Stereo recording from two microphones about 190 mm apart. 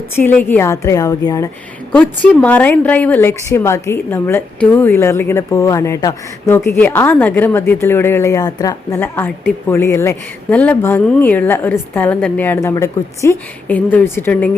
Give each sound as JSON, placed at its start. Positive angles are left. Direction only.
{"t": 0.2, "sound": "a woman's voice", "side_deg": 10}
{"t": 1.9, "sound": "a woman's voice", "side_deg": 5}